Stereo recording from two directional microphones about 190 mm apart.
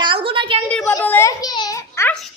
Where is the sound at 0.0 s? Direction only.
25° right (ahead or behind).